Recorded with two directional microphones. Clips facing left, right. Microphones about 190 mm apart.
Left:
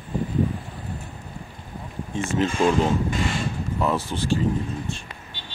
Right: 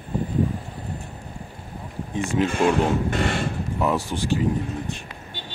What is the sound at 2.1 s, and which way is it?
Speech, 15° right (ahead or behind).